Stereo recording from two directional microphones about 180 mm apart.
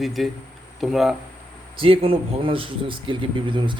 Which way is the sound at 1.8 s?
30° right (ahead or behind).